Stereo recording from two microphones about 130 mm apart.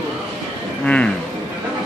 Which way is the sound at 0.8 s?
10° left (ahead or behind).